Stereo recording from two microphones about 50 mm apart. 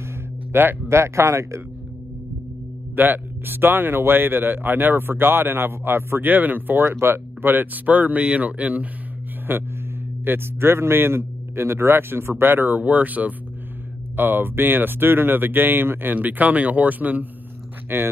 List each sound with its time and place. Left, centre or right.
0.5 s speech: right
0.8 s speech: right
3.0 s a man's voice: right
6.2 s speech: right
6.8 s speech: right
9.5 s a man's voice: right
17.8 s speech: right